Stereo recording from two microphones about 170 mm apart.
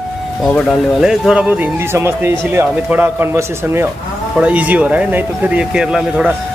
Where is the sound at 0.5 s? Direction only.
5° right (ahead or behind).